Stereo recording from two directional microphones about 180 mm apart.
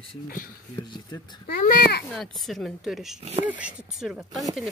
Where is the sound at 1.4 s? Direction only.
50° left (ahead or behind).